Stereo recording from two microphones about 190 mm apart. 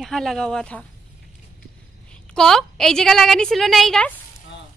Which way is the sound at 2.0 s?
5° left (ahead or behind).